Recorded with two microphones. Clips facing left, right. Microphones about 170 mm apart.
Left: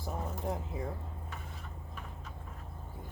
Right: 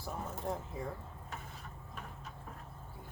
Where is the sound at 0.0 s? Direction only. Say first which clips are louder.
Left 2 dB; 15° left (ahead or behind).